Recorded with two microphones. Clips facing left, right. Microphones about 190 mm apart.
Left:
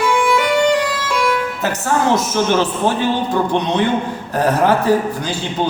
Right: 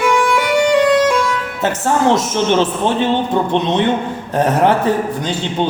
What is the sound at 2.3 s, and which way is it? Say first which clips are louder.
A man's voice: right 1 dB; 25° right (ahead or behind).